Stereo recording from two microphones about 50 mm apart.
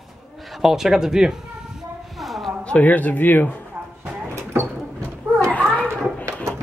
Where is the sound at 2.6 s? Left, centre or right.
Left.